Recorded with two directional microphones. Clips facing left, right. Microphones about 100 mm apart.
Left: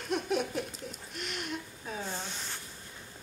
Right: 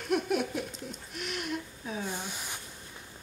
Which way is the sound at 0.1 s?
5° right (ahead or behind).